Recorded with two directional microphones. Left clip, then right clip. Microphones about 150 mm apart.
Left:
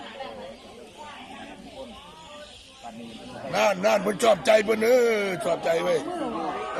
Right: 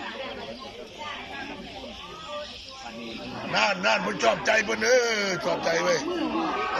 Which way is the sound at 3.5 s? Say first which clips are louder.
Left 2 dB; 40° left (ahead or behind).